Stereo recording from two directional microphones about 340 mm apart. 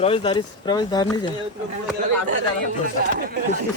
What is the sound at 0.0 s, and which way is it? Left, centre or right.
Speech, centre.